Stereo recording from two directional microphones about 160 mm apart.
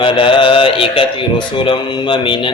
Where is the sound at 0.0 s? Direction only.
30° left (ahead or behind).